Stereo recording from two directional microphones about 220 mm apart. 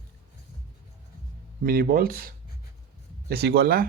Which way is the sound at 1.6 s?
40° right (ahead or behind).